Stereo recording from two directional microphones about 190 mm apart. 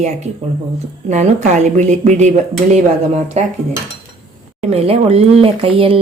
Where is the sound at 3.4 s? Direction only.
35° right (ahead or behind).